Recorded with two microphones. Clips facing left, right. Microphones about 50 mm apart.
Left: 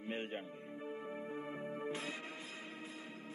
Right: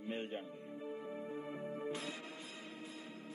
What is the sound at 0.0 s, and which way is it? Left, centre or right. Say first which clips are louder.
Music: even; left.